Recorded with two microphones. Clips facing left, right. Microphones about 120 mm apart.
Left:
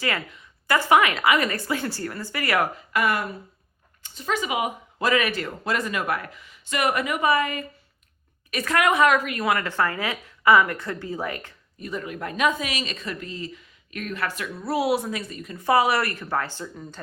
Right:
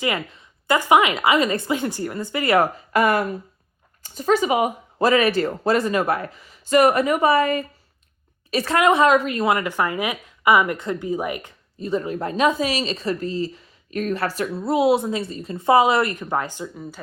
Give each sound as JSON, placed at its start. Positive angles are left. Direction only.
{"t": 0.0, "sound": "a woman's voice", "side_deg": -20}
{"t": 11.8, "sound": "speech", "side_deg": -30}
{"t": 14.6, "sound": "a woman's voice", "side_deg": -25}